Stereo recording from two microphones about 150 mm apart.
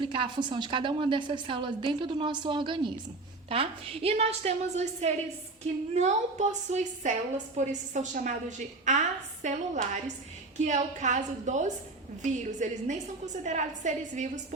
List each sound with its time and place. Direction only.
0.0 s a woman's voice: 35° right (ahead or behind); by 14.4 s 55° right (ahead or behind)